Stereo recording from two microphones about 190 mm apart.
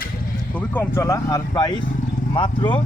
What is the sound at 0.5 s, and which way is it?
Speech, 10° left (ahead or behind).